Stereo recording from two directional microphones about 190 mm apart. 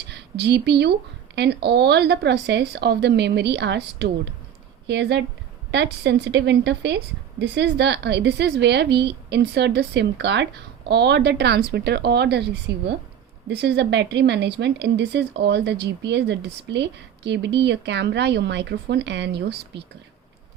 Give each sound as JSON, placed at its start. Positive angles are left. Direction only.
{"t": 0.1, "sound": "a woman's voice", "side_deg": -60}